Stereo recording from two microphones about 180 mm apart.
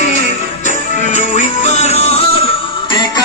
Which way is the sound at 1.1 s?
40° left (ahead or behind).